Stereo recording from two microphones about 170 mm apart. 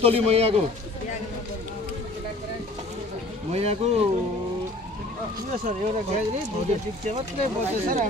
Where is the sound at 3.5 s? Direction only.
40° right (ahead or behind).